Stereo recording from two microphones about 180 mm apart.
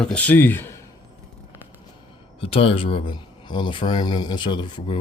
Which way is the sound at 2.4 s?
30° left (ahead or behind).